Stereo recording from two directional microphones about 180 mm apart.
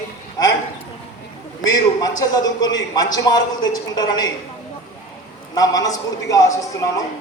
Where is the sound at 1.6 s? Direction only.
20° left (ahead or behind).